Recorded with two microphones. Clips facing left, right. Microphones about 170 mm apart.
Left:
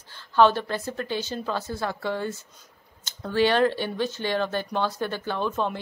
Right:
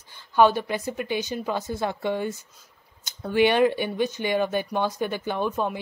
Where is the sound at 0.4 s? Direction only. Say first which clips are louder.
Even; 10° right (ahead or behind).